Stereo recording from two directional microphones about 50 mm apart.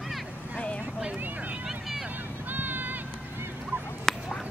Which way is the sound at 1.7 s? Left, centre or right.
Centre.